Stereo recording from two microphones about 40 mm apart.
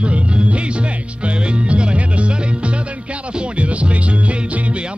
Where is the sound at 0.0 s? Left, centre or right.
Right.